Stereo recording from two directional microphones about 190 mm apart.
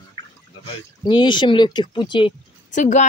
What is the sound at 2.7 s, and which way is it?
Speech, 40° left (ahead or behind).